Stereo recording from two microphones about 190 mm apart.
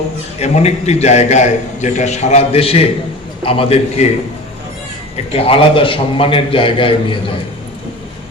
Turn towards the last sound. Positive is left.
turn(degrees=25)  # may be behind; listen again after turning